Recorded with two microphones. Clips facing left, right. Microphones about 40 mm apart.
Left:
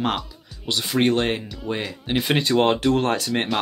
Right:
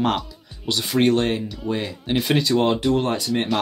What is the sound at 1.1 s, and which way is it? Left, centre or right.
Speech, left.